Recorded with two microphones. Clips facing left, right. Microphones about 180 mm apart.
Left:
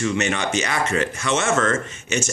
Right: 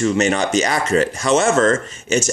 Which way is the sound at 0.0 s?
35° right (ahead or behind).